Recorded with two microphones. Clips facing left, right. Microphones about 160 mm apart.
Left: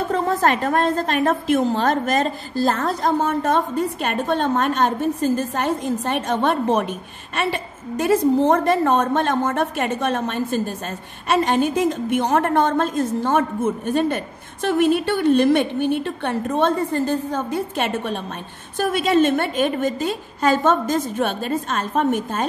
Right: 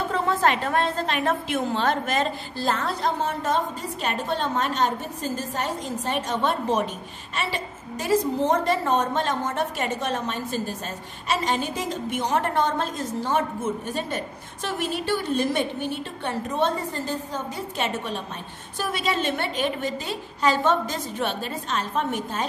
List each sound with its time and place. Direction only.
0.1 s a woman's voice: 45° left (ahead or behind)